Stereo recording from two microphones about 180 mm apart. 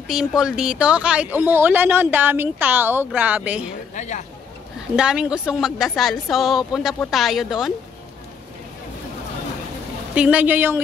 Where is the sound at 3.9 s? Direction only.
40° left (ahead or behind).